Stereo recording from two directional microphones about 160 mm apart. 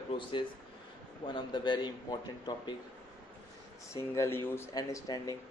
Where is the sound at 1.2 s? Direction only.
30° left (ahead or behind).